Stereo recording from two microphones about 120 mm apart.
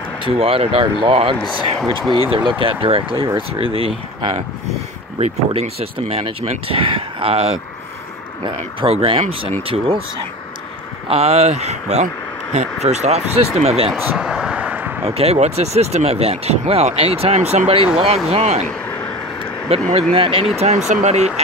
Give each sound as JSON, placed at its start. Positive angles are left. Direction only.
{"t": 0.2, "sound": "speech", "side_deg": -50}
{"t": 5.2, "sound": "speech", "side_deg": -60}
{"t": 8.8, "sound": "speech", "side_deg": -50}
{"t": 11.1, "sound": "speech", "side_deg": -60}
{"t": 13.8, "sound": "a sound", "side_deg": -5}
{"t": 15.0, "sound": "speech", "side_deg": -60}
{"t": 19.7, "sound": "speech", "side_deg": -60}
{"t": 20.5, "sound": "speech", "side_deg": -65}